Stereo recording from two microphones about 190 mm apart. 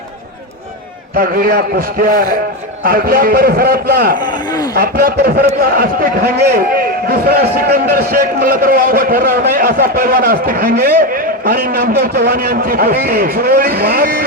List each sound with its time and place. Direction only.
1.1 s a man's voice: 50° right (ahead or behind)
4.2 s a sound: 20° left (ahead or behind)
4.7 s a man's voice: 50° right (ahead or behind)